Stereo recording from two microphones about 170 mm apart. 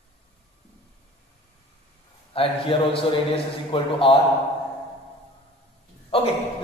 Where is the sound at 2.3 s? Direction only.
30° left (ahead or behind).